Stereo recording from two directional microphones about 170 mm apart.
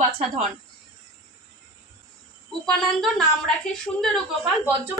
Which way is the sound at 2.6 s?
5° left (ahead or behind).